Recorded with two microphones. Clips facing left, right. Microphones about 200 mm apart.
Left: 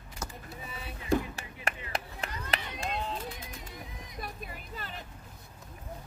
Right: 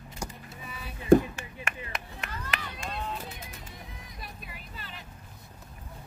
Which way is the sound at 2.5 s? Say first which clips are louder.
Left 3 dB; 25° left (ahead or behind).